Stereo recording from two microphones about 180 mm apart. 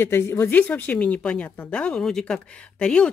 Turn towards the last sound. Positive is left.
turn(degrees=5)  # may be behind; listen again after turning